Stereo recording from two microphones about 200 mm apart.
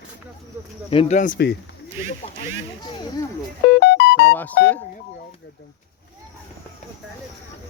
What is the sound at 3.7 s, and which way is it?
Music, 60° left (ahead or behind).